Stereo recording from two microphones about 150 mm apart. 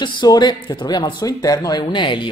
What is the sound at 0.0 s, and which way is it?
Speech, 30° left (ahead or behind).